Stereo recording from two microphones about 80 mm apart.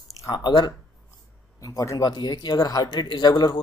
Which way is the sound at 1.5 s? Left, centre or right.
Left.